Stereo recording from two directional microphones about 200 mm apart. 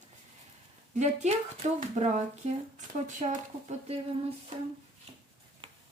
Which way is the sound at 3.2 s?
35° right (ahead or behind).